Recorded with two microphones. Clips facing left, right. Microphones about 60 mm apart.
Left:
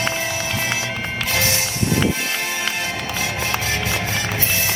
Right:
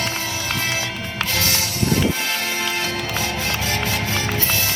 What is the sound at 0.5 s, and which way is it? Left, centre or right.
Music, left.